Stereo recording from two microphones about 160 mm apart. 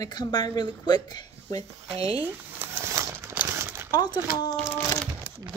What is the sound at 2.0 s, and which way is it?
Speech, 40° right (ahead or behind).